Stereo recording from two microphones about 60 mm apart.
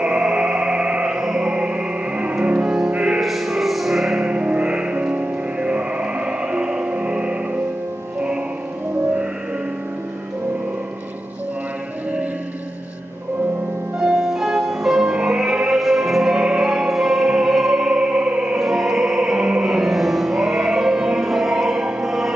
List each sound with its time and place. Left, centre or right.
0.0 s music: centre
3.2 s music: centre
4.3 s music: centre
13.9 s music: centre
18.6 s music: centre